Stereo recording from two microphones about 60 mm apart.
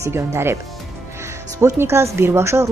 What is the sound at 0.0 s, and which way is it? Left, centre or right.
Speech, right.